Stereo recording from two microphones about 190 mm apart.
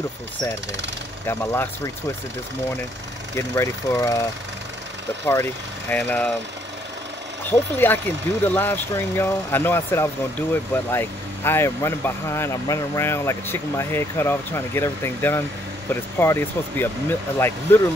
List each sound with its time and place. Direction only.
1.2 s speech: 15° left (ahead or behind)
3.3 s speech: 15° left (ahead or behind)
5.2 s speech: 15° left (ahead or behind)
7.4 s speech: 10° left (ahead or behind)